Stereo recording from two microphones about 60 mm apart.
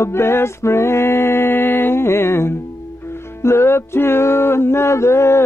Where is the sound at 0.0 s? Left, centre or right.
Left.